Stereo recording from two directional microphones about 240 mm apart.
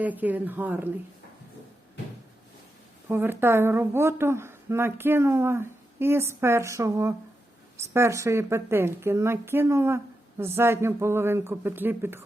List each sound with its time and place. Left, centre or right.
0.0 s a woman's voice: centre
3.1 s a woman's voice: centre